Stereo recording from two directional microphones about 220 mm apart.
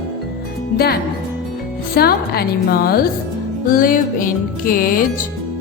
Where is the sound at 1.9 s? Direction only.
45° left (ahead or behind).